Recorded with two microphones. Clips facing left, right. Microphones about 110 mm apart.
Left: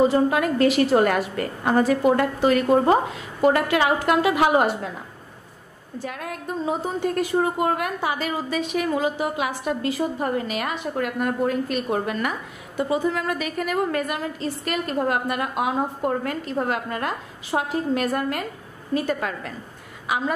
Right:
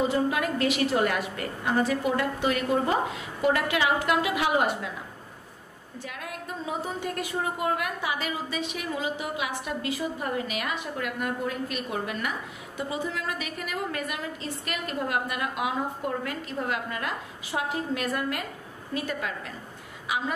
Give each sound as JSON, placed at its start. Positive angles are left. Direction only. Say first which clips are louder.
{"t": 0.1, "sound": "a woman's voice", "louder": "left 6 dB", "side_deg": 45}
{"t": 5.9, "sound": "a woman's voice", "louder": "left 6 dB", "side_deg": 45}